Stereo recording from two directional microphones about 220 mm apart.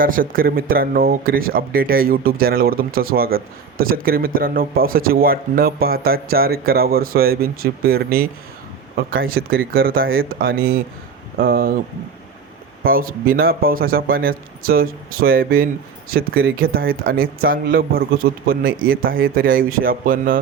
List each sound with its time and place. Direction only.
0.0 s speech: 40° right (ahead or behind)
12.8 s speech: 40° right (ahead or behind)